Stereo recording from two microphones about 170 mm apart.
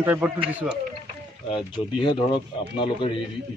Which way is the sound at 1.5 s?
30° left (ahead or behind).